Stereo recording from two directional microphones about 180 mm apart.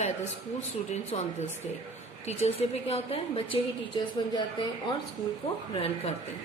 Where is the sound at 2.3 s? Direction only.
35° left (ahead or behind).